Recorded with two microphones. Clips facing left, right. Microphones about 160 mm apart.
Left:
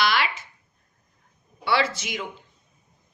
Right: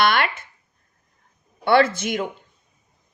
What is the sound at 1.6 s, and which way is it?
Speech, 50° right (ahead or behind).